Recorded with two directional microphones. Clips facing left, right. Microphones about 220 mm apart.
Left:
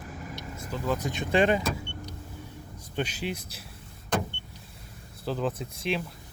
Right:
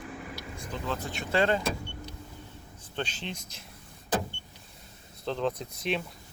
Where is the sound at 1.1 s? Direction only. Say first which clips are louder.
Left 2 dB; 15° left (ahead or behind).